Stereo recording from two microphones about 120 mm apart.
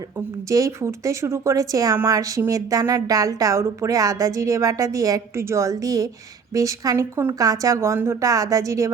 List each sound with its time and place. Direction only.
0.4 s speech: 25° right (ahead or behind)